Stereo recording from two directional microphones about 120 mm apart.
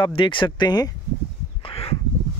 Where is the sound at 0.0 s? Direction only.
45° left (ahead or behind).